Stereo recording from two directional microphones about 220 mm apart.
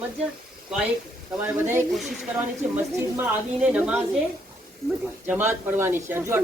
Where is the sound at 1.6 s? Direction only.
5° right (ahead or behind).